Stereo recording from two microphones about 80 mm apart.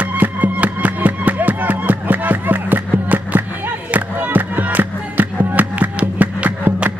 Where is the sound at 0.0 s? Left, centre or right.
Centre.